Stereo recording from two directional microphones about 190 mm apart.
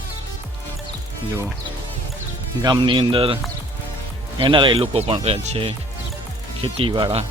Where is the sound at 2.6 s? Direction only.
25° right (ahead or behind).